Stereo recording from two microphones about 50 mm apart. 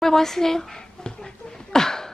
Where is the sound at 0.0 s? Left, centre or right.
Centre.